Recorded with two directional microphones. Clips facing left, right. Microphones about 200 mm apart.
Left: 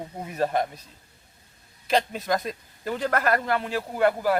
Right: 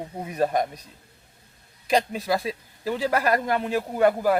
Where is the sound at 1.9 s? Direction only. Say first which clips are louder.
Right 1 dB; 10° right (ahead or behind).